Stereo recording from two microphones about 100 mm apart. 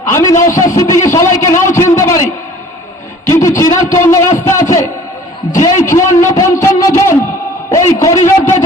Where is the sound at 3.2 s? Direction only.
30° left (ahead or behind).